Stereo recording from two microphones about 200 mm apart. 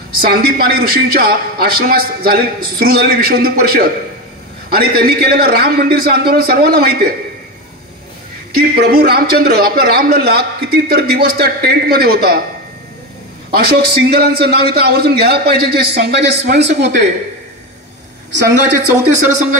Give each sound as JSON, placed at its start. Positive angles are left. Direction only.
{"t": 0.2, "sound": "a man's voice", "side_deg": -50}
{"t": 8.7, "sound": "a man's voice", "side_deg": -50}
{"t": 13.5, "sound": "a man's voice", "side_deg": -55}
{"t": 18.9, "sound": "speech", "side_deg": -10}